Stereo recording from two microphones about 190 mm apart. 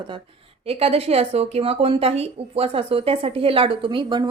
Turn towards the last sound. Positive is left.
turn(degrees=-25)  # may be behind; listen again after turning